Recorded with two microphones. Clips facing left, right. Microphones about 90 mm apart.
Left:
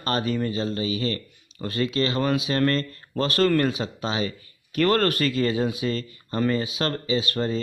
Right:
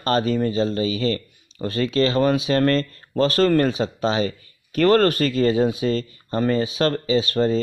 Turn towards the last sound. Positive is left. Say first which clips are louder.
# right 5 dB
turn(degrees=-30)  # may be behind; listen again after turning